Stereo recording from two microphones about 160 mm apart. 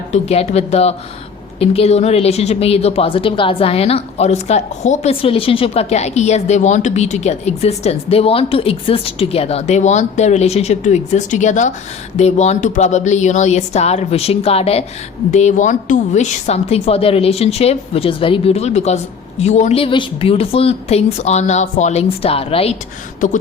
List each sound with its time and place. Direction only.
0.1 s a woman's voice: 40° left (ahead or behind)